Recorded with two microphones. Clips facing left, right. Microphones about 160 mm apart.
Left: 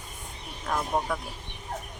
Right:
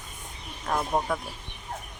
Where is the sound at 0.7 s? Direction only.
10° right (ahead or behind).